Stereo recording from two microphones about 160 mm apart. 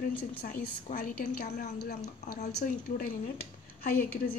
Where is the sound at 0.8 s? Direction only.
60° left (ahead or behind).